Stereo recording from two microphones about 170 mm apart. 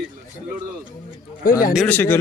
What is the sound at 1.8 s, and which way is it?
Speech, 10° left (ahead or behind).